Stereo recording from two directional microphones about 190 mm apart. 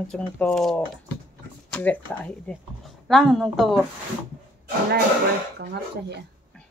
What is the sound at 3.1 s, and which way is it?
Speech, centre (ahead or behind).